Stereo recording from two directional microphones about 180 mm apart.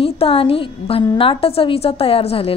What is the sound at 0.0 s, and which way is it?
A woman's voice, 30° left (ahead or behind).